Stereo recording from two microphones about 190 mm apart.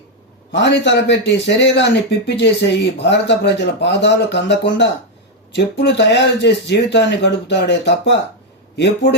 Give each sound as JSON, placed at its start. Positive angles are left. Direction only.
{"t": 0.5, "sound": "a man's voice", "side_deg": 70}